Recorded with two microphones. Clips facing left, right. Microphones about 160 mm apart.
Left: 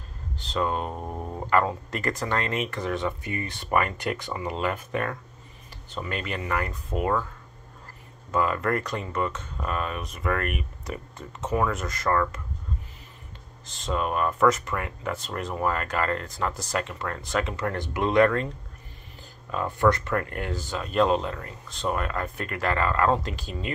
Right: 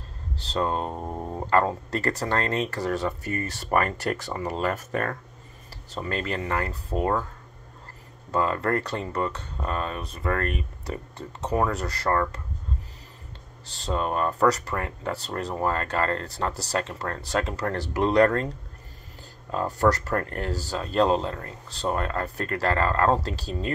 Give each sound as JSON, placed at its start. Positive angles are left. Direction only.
{"t": 0.5, "sound": "speech", "side_deg": -30}
{"t": 1.5, "sound": "speech", "side_deg": -35}
{"t": 8.3, "sound": "speech", "side_deg": -30}
{"t": 13.7, "sound": "speech", "side_deg": -35}
{"t": 19.5, "sound": "speech", "side_deg": -40}